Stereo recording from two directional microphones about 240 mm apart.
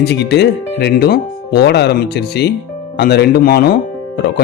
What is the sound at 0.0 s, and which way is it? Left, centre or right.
Speech, left.